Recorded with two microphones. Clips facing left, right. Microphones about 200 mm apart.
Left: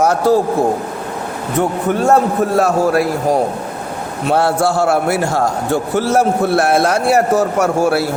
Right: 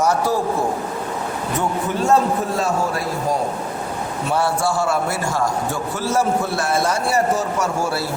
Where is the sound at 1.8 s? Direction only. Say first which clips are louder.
Left 4 dB; 55° left (ahead or behind).